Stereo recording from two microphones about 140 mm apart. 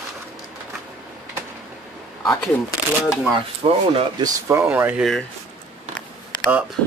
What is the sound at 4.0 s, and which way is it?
Speech, 30° right (ahead or behind).